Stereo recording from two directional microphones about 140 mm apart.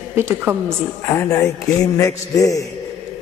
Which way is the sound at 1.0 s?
20° left (ahead or behind).